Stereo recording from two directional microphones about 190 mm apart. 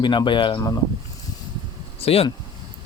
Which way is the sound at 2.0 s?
30° left (ahead or behind).